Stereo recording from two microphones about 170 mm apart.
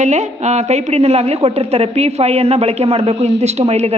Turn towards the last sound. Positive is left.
turn(degrees=-40)  # may be behind; listen again after turning